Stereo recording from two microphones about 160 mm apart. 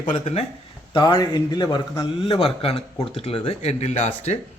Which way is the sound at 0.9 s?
25° left (ahead or behind).